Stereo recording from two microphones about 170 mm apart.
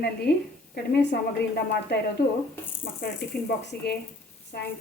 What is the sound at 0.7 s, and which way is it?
Speech, 90° left.